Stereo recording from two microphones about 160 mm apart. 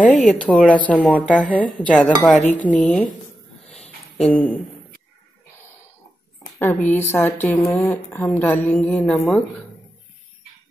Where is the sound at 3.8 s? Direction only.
40° left (ahead or behind).